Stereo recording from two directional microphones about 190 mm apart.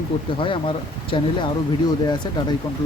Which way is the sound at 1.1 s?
30° left (ahead or behind).